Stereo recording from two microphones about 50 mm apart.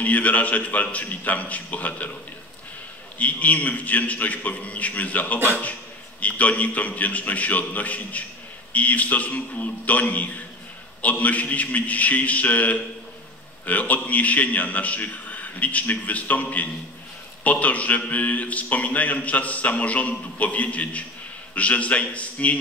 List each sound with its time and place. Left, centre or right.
0.0 s a man's voice: left
3.2 s a man's voice: left